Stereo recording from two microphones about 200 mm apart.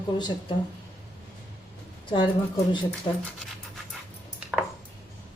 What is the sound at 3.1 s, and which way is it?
Speech, 20° left (ahead or behind).